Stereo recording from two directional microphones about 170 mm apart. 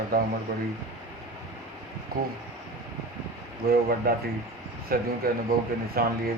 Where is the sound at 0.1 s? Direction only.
60° right (ahead or behind).